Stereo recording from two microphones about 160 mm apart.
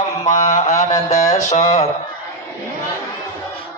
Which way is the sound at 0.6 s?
50° left (ahead or behind).